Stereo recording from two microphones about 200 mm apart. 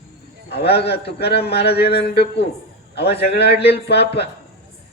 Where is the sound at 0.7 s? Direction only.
55° left (ahead or behind).